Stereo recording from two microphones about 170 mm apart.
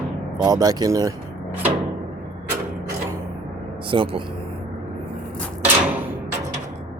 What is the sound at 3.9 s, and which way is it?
Speech, 30° right (ahead or behind).